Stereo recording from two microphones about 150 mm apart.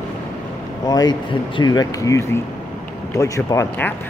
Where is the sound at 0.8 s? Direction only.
25° left (ahead or behind).